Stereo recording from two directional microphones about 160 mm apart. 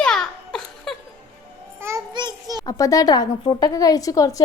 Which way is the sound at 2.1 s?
25° right (ahead or behind).